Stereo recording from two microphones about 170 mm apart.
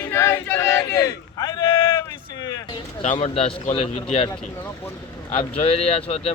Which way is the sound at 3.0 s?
40° left (ahead or behind).